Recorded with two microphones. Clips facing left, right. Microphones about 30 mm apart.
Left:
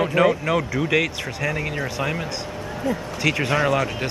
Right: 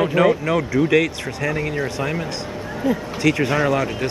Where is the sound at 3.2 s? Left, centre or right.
Centre.